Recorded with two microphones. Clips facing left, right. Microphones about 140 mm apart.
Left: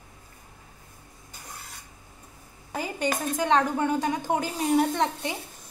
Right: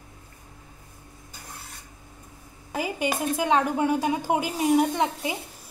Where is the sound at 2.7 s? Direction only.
10° right (ahead or behind).